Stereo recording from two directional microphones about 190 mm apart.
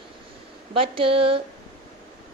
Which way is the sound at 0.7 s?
30° right (ahead or behind).